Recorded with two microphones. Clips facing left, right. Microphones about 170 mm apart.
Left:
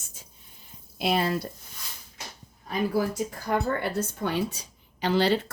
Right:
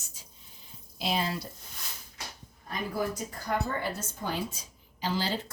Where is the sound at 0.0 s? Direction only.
50° left (ahead or behind).